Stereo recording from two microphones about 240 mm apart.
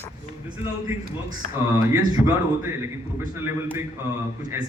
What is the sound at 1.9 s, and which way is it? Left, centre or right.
Speech, centre.